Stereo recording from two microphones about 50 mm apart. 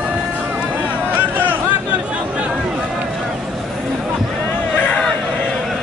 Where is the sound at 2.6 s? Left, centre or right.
Centre.